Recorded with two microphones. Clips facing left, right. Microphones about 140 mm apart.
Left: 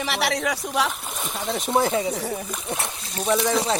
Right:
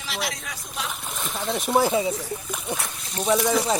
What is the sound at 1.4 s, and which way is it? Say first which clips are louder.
A man's voice: right 1 dB; centre (ahead or behind).